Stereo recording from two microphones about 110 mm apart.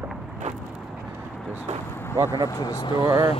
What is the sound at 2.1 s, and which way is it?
Speech, 30° right (ahead or behind).